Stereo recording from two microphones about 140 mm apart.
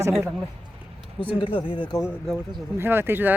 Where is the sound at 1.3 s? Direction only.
40° left (ahead or behind).